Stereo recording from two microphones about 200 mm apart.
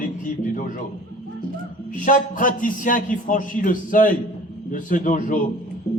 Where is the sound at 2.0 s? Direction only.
40° left (ahead or behind).